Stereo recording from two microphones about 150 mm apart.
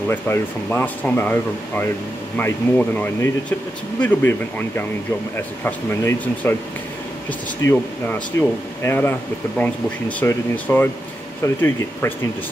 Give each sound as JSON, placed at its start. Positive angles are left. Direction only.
{"t": 0.1, "sound": "speech", "side_deg": 10}
{"t": 7.6, "sound": "speech", "side_deg": 15}
{"t": 10.5, "sound": "speech", "side_deg": 10}